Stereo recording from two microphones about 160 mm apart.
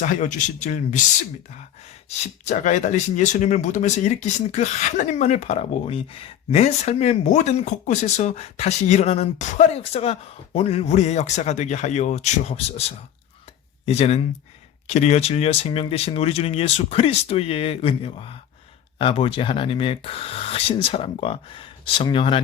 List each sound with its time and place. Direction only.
0.0 s speech: 50° left (ahead or behind)
2.0 s speech: 45° left (ahead or behind)
13.8 s speech: 40° left (ahead or behind)